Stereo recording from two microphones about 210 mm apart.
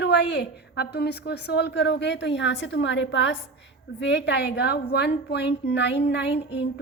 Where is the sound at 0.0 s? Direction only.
55° left (ahead or behind).